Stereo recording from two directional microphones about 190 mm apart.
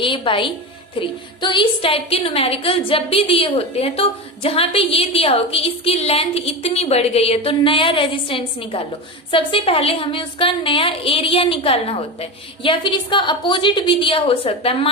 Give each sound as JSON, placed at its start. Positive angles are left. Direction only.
{"t": 0.0, "sound": "a woman's voice", "side_deg": 25}